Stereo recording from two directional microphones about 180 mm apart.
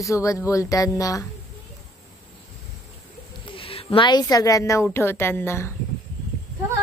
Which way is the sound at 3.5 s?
30° left (ahead or behind).